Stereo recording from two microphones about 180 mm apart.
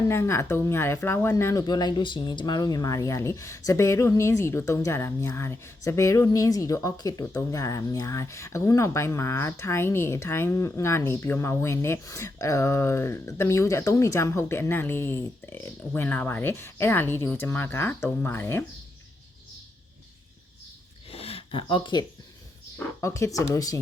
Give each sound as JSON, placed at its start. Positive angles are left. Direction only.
{"t": 0.0, "sound": "speech", "side_deg": 15}
{"t": 21.1, "sound": "a sound", "side_deg": 30}
{"t": 23.0, "sound": "speech", "side_deg": 15}